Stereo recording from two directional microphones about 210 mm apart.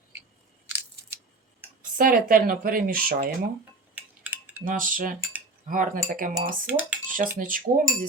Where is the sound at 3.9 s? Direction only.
10° right (ahead or behind).